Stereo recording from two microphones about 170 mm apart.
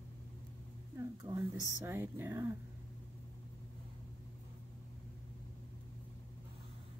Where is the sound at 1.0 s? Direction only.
25° right (ahead or behind).